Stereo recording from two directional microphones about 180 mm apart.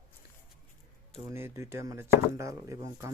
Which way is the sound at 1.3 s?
15° right (ahead or behind).